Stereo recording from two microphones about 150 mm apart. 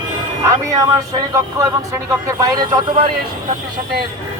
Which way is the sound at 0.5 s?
20° right (ahead or behind).